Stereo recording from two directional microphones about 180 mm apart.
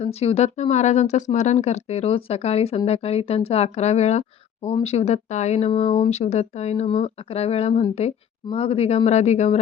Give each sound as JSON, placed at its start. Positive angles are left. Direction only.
{"t": 0.0, "sound": "speech", "side_deg": 35}